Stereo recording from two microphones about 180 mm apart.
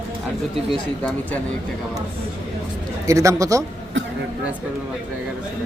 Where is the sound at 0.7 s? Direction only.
5° left (ahead or behind).